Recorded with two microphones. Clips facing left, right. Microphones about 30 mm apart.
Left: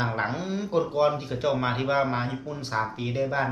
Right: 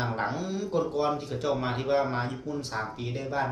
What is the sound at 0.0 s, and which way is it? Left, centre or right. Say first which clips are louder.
Speech: left 2 dB; left.